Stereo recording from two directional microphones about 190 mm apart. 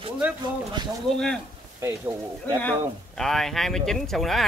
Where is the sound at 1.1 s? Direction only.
5° left (ahead or behind).